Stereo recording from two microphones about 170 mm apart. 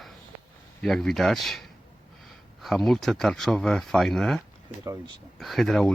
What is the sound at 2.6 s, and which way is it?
Speech, centre (ahead or behind).